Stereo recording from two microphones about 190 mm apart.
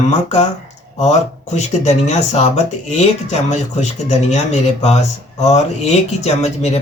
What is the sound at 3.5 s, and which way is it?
Speech, 35° left (ahead or behind).